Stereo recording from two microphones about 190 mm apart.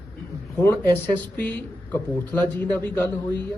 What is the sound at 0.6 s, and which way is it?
Speech, 10° left (ahead or behind).